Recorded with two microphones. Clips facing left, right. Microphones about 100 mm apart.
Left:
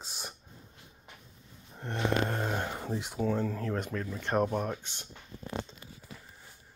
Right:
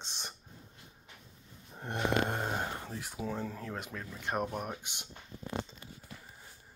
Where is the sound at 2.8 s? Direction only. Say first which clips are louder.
Left 7 dB; 20° left (ahead or behind).